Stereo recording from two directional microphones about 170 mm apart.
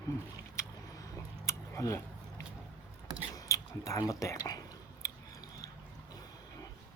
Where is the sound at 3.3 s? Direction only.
20° left (ahead or behind).